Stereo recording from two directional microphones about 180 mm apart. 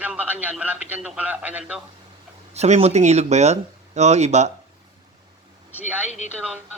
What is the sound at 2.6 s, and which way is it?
Speech, 35° right (ahead or behind).